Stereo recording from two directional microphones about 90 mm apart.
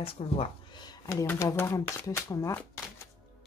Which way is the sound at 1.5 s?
35° left (ahead or behind).